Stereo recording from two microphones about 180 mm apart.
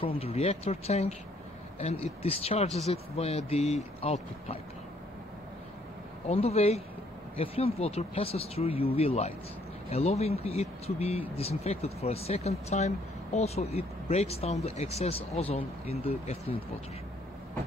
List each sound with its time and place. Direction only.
0.0 s speech: 30° left (ahead or behind)
6.2 s speech: 35° left (ahead or behind)